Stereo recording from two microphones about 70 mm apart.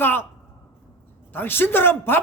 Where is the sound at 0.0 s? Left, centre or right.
Left.